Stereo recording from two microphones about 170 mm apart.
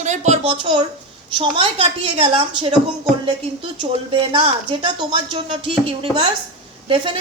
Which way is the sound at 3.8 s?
30° right (ahead or behind).